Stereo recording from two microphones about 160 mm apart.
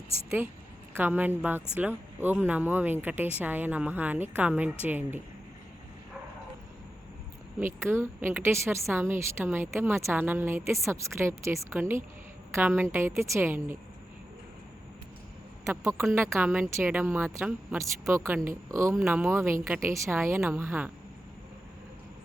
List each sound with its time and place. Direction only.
0.3 s speech: 15° right (ahead or behind)
7.6 s speech: 15° right (ahead or behind)
15.6 s speech: 15° right (ahead or behind)